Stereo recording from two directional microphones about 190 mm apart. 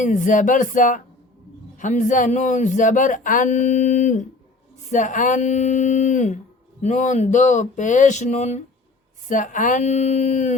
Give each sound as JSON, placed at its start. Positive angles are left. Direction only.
{"t": 0.0, "sound": "speech", "side_deg": 40}